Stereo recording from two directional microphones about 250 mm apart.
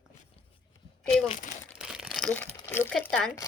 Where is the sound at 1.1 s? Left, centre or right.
Left.